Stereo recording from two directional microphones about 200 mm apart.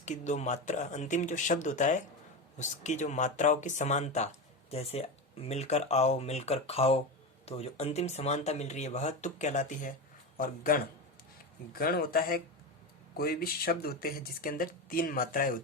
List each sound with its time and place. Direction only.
0.0 s speech: 35° left (ahead or behind)